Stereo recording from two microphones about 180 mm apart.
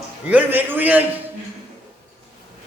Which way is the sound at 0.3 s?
10° right (ahead or behind).